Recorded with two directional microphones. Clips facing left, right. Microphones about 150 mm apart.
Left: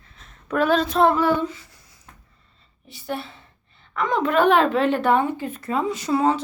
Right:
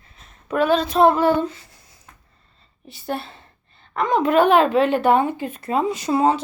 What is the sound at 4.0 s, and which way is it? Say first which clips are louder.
Speech: right 2 dB; 15° right (ahead or behind).